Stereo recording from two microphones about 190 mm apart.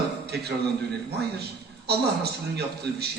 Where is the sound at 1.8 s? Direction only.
60° right (ahead or behind).